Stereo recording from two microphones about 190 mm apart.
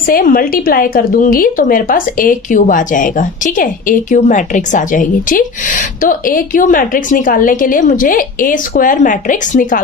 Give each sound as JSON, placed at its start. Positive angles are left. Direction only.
{"t": 0.1, "sound": "speech", "side_deg": 50}